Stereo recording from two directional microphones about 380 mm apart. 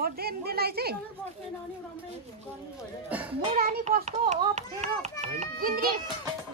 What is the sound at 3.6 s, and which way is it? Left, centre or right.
A child's voice, right.